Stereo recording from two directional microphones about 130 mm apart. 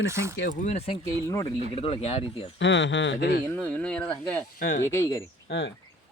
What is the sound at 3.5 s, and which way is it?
Speech, 10° left (ahead or behind).